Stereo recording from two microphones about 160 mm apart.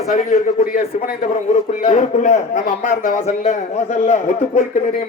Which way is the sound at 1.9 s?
50° left (ahead or behind).